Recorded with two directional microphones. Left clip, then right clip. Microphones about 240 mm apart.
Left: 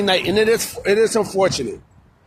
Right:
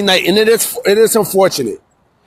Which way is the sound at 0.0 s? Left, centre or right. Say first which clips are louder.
Right 5 dB; right.